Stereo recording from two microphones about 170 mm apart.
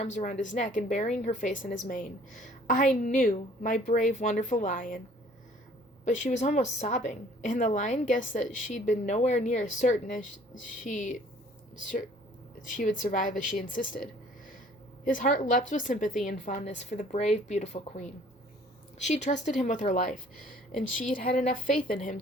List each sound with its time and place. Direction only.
0.0 s a woman's voice: 45° left (ahead or behind)
6.1 s a woman's voice: 45° left (ahead or behind)
12.7 s a woman's voice: 50° left (ahead or behind)
15.0 s a woman's voice: 50° left (ahead or behind)